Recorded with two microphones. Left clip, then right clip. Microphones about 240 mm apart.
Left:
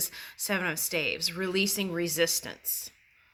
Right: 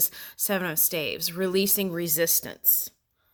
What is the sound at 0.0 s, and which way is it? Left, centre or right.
Speech, right.